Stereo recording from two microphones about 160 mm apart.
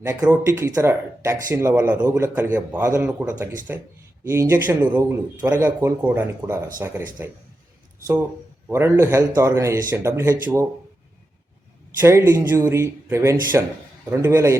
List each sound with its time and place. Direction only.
0.0 s speech: 10° right (ahead or behind)
8.7 s speech: 15° right (ahead or behind)
11.9 s speech: 15° right (ahead or behind)